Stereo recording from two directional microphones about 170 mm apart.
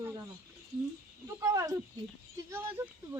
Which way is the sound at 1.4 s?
20° right (ahead or behind).